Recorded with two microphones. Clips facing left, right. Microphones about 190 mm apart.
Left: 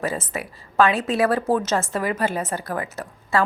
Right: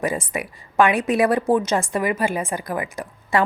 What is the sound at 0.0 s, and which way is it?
A woman's voice, 15° right (ahead or behind).